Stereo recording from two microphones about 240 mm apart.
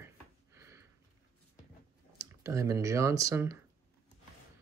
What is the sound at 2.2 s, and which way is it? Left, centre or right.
Speech, centre.